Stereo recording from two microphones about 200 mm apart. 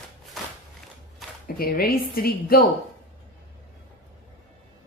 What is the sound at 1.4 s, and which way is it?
A woman's voice, 45° left (ahead or behind).